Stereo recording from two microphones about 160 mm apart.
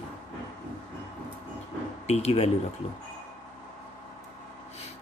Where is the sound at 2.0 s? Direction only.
40° left (ahead or behind).